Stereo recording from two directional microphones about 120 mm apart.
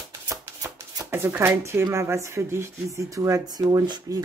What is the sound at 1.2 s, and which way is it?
Speech, 20° right (ahead or behind).